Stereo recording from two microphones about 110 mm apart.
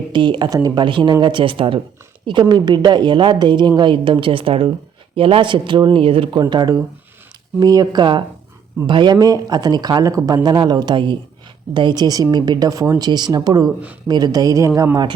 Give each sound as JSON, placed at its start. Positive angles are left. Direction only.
{"t": 0.1, "sound": "a woman's voice", "side_deg": -45}
{"t": 0.9, "sound": "a woman's voice", "side_deg": -45}
{"t": 6.4, "sound": "speech", "side_deg": -40}